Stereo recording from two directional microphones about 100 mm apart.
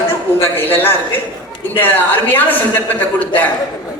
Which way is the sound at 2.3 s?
20° left (ahead or behind).